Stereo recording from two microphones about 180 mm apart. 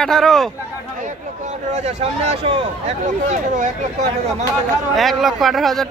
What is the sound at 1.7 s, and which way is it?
Speech, 35° right (ahead or behind).